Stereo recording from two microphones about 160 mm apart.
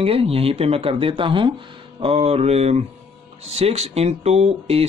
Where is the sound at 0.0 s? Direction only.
35° right (ahead or behind).